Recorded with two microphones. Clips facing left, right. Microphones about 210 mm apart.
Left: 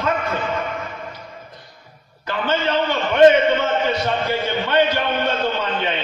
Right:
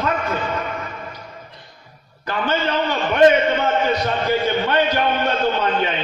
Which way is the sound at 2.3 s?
45° right (ahead or behind).